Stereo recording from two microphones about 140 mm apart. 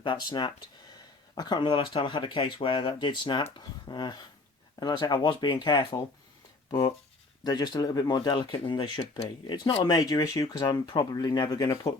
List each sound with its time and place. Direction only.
0.0 s speech: 35° left (ahead or behind)
10.4 s speech: 35° left (ahead or behind)